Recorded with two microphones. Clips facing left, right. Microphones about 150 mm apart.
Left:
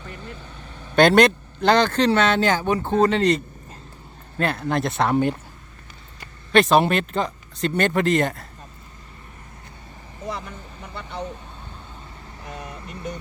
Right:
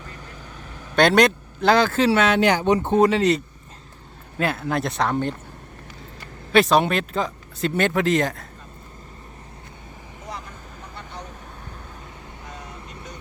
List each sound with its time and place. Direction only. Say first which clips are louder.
0.8 s speech: left 2 dB; centre (ahead or behind); by 3.1 s 20° right (ahead or behind)
3.1 s speech: even; 5° right (ahead or behind)
6.5 s speech: left 1 dB; centre (ahead or behind)